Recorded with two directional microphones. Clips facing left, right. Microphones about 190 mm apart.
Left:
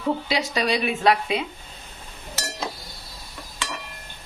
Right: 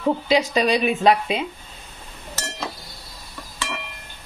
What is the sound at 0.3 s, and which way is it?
Speech, 20° right (ahead or behind).